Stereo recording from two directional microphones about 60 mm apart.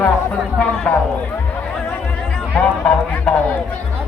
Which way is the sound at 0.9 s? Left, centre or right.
Centre.